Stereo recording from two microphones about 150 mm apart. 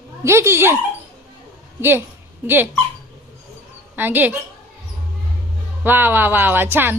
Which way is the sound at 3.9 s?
10° right (ahead or behind).